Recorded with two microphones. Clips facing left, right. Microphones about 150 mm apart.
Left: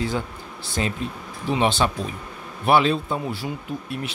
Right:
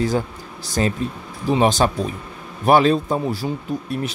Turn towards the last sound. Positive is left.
turn(degrees=-40)  # may be behind; listen again after turning